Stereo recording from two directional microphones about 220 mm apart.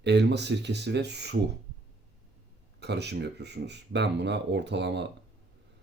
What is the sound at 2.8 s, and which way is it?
Speech, 50° right (ahead or behind).